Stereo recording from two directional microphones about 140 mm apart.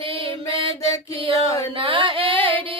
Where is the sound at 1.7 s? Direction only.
40° right (ahead or behind).